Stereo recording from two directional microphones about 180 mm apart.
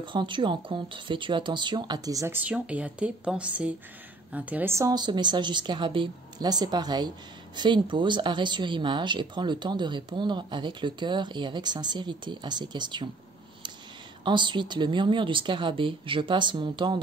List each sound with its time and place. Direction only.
0.0 s speech: 25° right (ahead or behind)
2.4 s a woman's voice: 5° right (ahead or behind); by 13.1 s 25° right (ahead or behind)
14.2 s speech: 25° right (ahead or behind)